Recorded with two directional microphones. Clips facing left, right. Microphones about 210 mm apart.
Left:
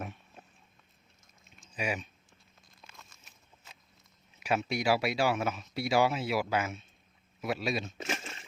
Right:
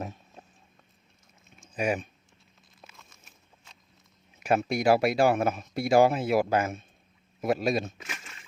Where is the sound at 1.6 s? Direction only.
50° right (ahead or behind).